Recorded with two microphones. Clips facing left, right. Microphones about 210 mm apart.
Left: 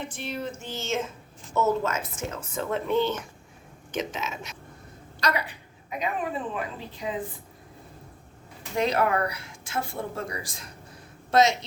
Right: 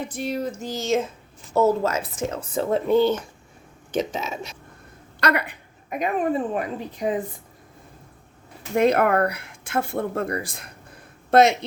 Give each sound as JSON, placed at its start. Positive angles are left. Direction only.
{"t": 0.1, "sound": "speech", "side_deg": -40}
{"t": 5.2, "sound": "a woman's voice", "side_deg": -60}
{"t": 8.7, "sound": "speech", "side_deg": -55}